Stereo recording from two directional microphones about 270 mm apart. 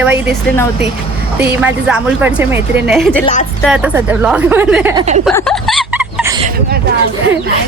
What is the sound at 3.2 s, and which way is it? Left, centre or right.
Speech, left.